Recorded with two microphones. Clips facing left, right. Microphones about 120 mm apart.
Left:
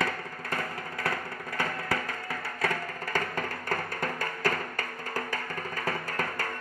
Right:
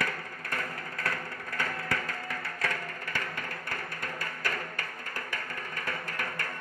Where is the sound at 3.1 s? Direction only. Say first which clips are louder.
Left 7 dB; 45° left (ahead or behind).